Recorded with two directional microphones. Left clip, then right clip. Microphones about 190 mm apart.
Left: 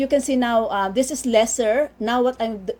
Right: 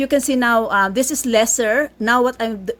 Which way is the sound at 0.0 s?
30° right (ahead or behind).